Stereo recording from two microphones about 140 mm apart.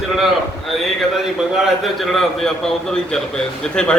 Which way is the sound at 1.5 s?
Centre (ahead or behind).